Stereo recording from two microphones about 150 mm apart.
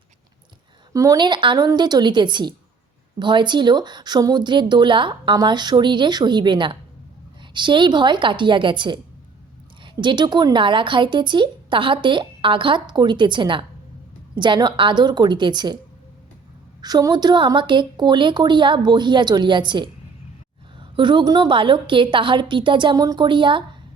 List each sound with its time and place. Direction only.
0.9 s a woman's voice: 25° right (ahead or behind)
16.8 s speech: 25° right (ahead or behind)